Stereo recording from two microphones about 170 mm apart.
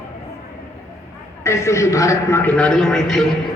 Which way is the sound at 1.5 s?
15° left (ahead or behind).